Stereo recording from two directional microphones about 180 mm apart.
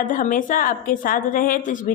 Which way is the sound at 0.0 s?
45° left (ahead or behind).